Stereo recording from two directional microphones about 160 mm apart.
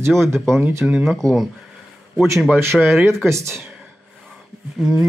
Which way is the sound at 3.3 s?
15° right (ahead or behind).